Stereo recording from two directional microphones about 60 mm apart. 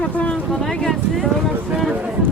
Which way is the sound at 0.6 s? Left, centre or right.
Centre.